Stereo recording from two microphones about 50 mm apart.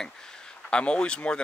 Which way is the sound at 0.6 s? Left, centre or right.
Left.